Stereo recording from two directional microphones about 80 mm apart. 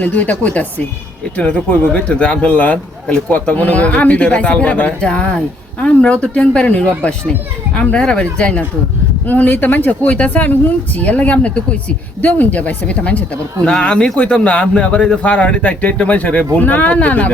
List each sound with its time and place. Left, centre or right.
0.0 s a man's voice: left